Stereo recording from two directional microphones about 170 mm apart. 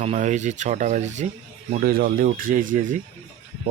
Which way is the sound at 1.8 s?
60° right (ahead or behind).